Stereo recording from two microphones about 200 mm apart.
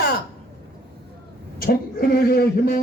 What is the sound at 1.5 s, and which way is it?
Speech, 45° left (ahead or behind).